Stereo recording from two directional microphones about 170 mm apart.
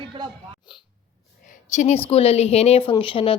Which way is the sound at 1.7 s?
45° left (ahead or behind).